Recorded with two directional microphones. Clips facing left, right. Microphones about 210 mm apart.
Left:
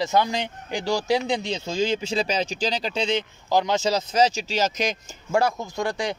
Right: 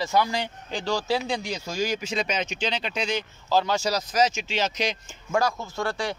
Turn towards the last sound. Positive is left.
turn(degrees=15)  # may be behind; listen again after turning